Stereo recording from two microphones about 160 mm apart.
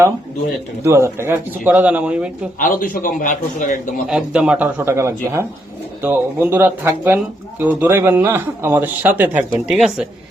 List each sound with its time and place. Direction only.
0.9 s speech: 15° right (ahead or behind)
2.6 s a man's voice: 60° left (ahead or behind)
4.1 s speech: 5° right (ahead or behind)